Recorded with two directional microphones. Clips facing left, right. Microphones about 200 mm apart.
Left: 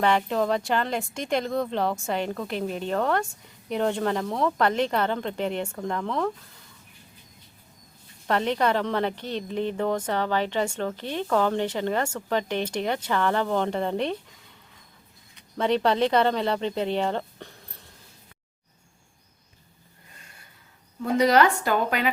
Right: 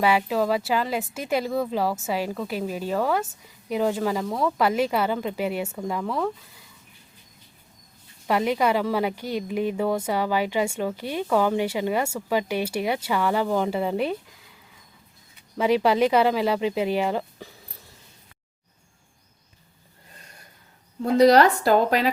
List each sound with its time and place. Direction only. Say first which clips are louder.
0.0 s speech: right 1 dB; 5° right (ahead or behind)
8.3 s speech: right 2 dB; 10° right (ahead or behind)
15.4 s speech: right 2 dB; 10° right (ahead or behind)
21.0 s a woman's voice: right 4 dB; 35° right (ahead or behind)